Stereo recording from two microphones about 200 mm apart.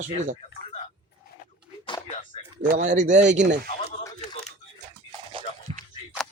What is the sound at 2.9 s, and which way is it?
Speech, 40° right (ahead or behind).